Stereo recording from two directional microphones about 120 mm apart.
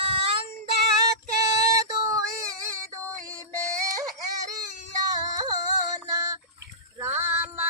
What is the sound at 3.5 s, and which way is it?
Music, 25° right (ahead or behind).